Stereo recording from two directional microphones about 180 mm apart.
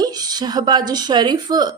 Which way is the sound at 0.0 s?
20° right (ahead or behind).